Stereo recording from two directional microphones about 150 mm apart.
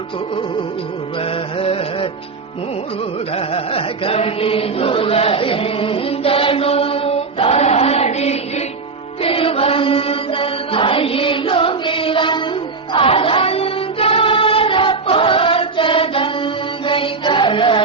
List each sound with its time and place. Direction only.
1.2 s music: 40° left (ahead or behind)
3.3 s chant: 40° left (ahead or behind)
12.9 s music: 35° left (ahead or behind)